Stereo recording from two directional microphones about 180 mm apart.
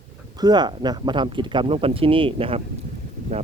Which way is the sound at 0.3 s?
20° right (ahead or behind).